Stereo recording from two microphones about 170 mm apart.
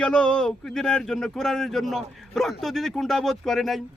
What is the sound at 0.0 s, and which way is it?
Speech, 5° left (ahead or behind).